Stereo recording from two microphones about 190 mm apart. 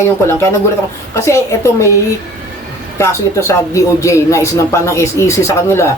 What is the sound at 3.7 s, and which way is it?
Speech, 15° left (ahead or behind).